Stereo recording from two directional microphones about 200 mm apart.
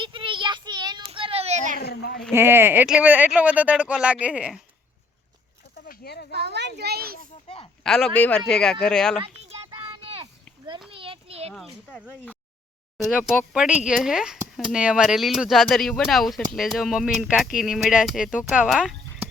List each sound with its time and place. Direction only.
0.0 s child singing: 25° right (ahead or behind)
1.8 s speech: 55° left (ahead or behind)
2.3 s speech: 10° right (ahead or behind)
5.9 s speech: 50° left (ahead or behind)
6.3 s a child's voice: 55° right (ahead or behind)
7.4 s speech: 30° left (ahead or behind)
7.9 s speech: centre (ahead or behind)
9.2 s children playing: 30° right (ahead or behind)
10.9 s children playing: 25° right (ahead or behind)
11.5 s speech: 5° left (ahead or behind)